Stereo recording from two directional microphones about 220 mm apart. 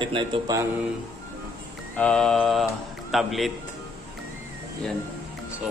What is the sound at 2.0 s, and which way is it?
A man's voice, 5° left (ahead or behind).